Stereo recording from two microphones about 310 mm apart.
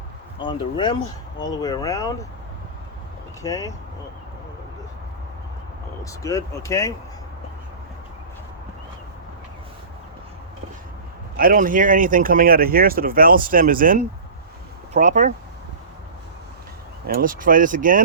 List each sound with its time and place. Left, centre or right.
0.4 s speech: centre
3.4 s speech: centre
6.1 s speech: centre
11.3 s speech: right
17.1 s speech: right